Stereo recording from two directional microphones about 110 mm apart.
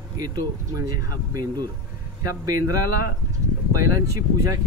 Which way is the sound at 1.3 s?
35° right (ahead or behind).